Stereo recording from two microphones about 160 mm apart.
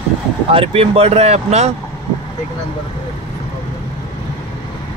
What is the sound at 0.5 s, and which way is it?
Speech, 35° right (ahead or behind).